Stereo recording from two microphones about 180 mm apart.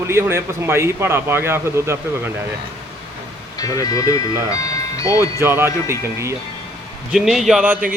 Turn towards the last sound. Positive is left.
turn(degrees=-5)  # may be behind; listen again after turning